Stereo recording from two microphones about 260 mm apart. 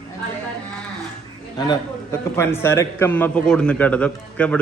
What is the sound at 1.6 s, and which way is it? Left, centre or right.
A man's voice, centre.